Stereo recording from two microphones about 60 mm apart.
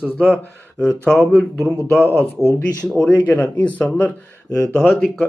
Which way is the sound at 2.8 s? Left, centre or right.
Centre.